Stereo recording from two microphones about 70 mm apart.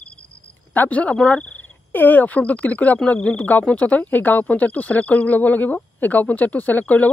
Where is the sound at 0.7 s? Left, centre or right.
Left.